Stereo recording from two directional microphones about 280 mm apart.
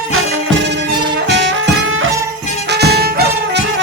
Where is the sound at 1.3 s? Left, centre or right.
Right.